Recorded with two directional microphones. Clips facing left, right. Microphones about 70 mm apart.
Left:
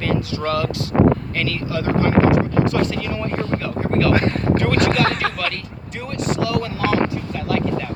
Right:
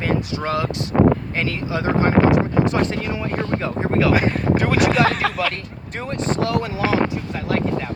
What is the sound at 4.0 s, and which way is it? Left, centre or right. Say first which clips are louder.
Speech: even; centre.